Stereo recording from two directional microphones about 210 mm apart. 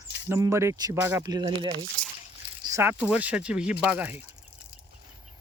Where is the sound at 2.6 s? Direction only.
10° right (ahead or behind).